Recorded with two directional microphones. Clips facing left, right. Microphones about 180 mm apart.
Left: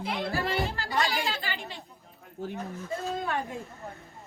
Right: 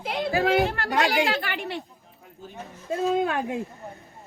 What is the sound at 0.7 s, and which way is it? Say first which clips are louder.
Speech: right 5 dB; 60° right (ahead or behind).